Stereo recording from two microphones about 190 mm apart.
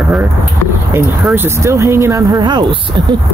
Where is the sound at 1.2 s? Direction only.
10° right (ahead or behind).